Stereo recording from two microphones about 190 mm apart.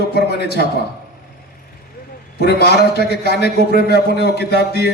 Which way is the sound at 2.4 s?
60° left (ahead or behind).